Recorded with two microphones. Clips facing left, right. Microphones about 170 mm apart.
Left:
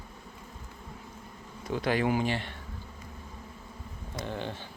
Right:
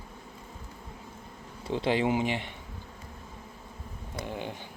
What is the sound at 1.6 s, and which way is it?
Speech, 25° right (ahead or behind).